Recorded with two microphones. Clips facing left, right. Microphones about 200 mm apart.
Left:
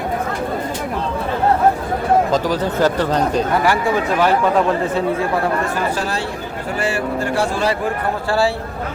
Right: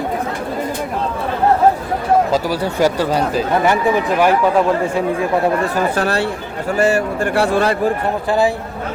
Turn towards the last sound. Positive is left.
turn(degrees=-60)  # may be behind; listen again after turning